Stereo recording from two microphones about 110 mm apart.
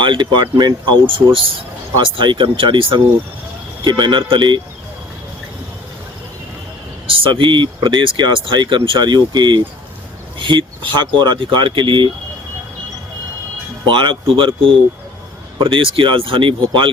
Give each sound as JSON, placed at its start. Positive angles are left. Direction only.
{"t": 0.0, "sound": "speech", "side_deg": -45}
{"t": 7.1, "sound": "speech", "side_deg": -55}
{"t": 13.8, "sound": "speech", "side_deg": -45}